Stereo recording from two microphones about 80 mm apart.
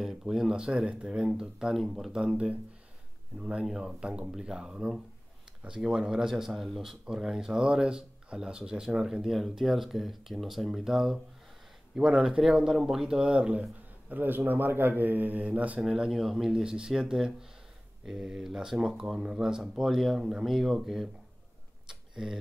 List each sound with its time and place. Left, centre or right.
0.3 s speech: centre
2.1 s speech: centre
15.8 s speech: centre
21.8 s a sound: centre